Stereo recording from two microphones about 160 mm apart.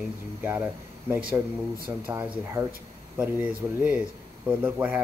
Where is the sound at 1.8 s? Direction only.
10° right (ahead or behind).